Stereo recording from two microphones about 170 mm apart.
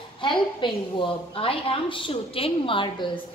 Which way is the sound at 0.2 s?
30° left (ahead or behind).